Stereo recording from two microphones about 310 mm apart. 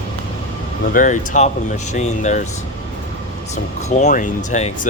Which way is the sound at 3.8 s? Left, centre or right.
Left.